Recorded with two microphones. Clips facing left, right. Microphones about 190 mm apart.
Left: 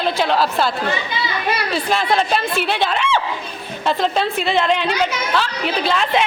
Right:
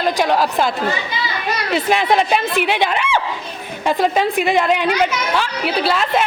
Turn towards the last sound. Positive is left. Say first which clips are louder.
# right 1 dB
turn(degrees=0)  # may be behind; listen again after turning